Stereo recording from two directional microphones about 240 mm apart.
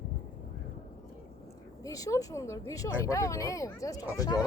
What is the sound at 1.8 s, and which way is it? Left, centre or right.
Speech, centre.